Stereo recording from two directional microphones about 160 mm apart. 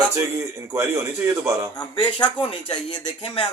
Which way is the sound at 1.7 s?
30° left (ahead or behind).